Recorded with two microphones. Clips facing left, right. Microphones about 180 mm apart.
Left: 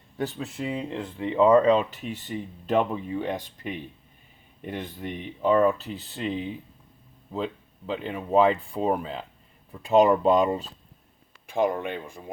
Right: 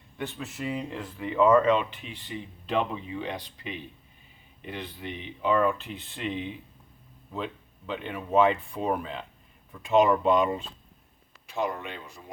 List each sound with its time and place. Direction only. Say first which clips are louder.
0.2 s speech: left 4 dB; 35° left (ahead or behind)
11.4 s speech: left 6 dB; 50° left (ahead or behind)